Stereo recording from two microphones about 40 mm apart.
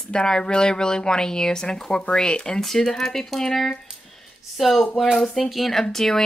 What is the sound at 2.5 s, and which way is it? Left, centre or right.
Speech, centre.